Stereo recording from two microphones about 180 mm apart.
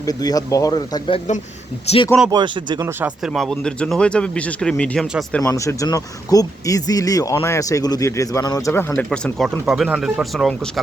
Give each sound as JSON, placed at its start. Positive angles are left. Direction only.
{"t": 0.0, "sound": "speech", "side_deg": 20}
{"t": 1.9, "sound": "speech", "side_deg": 35}
{"t": 2.3, "sound": "speech", "side_deg": -25}
{"t": 2.8, "sound": "speech", "side_deg": -10}
{"t": 3.3, "sound": "speech", "side_deg": 0}
{"t": 5.4, "sound": "speech", "side_deg": 15}